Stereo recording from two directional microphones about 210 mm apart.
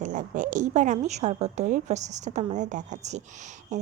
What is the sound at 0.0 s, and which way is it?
A woman's voice, 40° right (ahead or behind).